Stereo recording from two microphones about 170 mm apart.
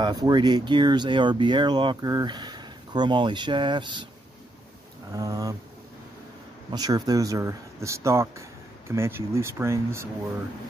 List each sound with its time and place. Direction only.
0.0 s speech: 25° right (ahead or behind)
5.1 s speech: 20° right (ahead or behind)
6.7 s speech: 20° right (ahead or behind)